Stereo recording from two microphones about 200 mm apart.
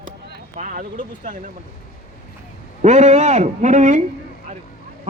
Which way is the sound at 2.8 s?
35° right (ahead or behind).